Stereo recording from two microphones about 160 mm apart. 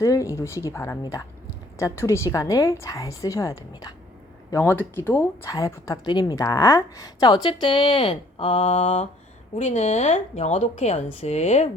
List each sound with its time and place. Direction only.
0.0 s speech: 20° left (ahead or behind); by 9.0 s 35° left (ahead or behind)
9.6 s speech: 45° left (ahead or behind)